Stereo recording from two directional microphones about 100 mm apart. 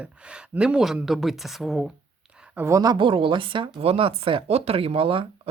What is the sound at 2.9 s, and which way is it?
Speech, 60° right (ahead or behind).